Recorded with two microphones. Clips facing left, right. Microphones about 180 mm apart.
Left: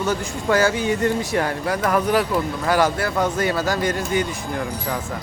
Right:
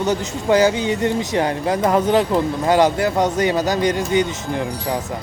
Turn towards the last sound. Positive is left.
turn(degrees=-20)  # may be behind; listen again after turning